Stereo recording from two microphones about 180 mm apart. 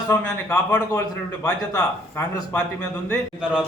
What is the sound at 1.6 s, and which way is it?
Speech, 20° left (ahead or behind).